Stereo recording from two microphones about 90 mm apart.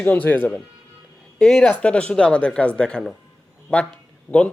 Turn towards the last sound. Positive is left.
turn(degrees=15)  # may be behind; listen again after turning